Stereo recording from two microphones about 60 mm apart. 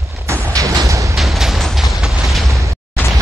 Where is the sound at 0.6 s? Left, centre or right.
Right.